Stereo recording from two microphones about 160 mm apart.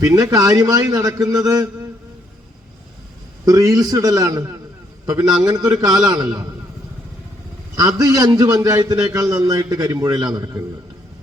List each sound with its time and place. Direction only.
0.0 s a man's voice: 20° right (ahead or behind)
3.4 s a man's voice: 20° right (ahead or behind)
7.8 s a man's voice: 25° right (ahead or behind)